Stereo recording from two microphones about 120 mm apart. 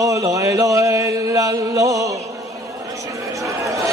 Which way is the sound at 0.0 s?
30° right (ahead or behind).